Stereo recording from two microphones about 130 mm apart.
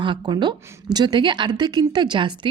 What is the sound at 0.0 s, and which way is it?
A woman's voice, 35° right (ahead or behind).